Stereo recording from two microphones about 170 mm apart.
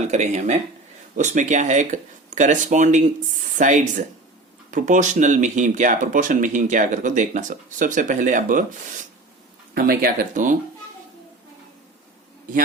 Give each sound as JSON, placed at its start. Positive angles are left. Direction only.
{"t": 0.1, "sound": "speech", "side_deg": -45}
{"t": 9.7, "sound": "speech", "side_deg": -60}